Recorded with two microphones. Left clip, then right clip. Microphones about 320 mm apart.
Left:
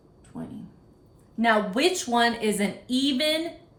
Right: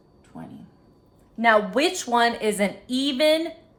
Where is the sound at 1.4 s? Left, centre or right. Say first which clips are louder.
Right 3 dB; centre.